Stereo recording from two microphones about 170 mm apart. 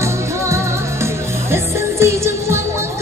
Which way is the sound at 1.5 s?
15° right (ahead or behind).